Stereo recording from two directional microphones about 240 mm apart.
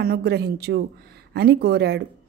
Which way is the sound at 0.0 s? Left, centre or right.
Right.